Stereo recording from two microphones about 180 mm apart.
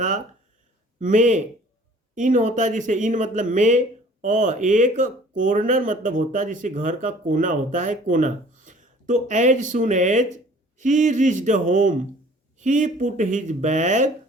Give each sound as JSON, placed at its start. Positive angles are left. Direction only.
{"t": 0.9, "sound": "speech", "side_deg": -45}